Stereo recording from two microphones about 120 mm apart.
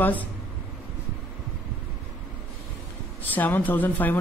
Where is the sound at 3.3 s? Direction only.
15° left (ahead or behind).